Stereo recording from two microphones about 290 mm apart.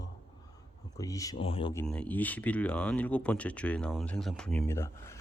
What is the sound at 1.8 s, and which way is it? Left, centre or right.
Speech, centre.